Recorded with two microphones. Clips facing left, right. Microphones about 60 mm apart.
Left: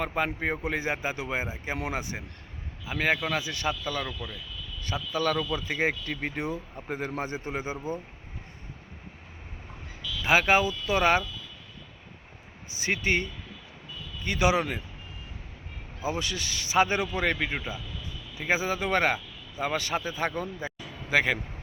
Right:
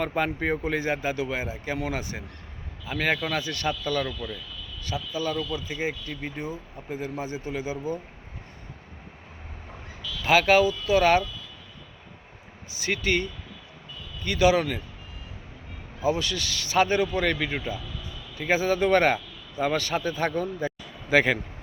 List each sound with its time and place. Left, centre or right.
0.0 s a man's voice: centre
4.8 s speech: left
5.1 s a man's voice: left
10.2 s a man's voice: left
12.7 s a man's voice: left
14.3 s a man's voice: left
16.0 s a man's voice: centre